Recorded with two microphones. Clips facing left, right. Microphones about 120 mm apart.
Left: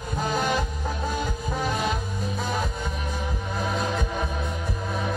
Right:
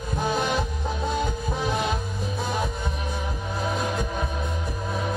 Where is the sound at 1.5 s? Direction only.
15° right (ahead or behind).